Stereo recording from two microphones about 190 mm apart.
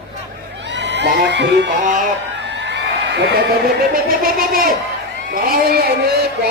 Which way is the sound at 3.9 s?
50° right (ahead or behind).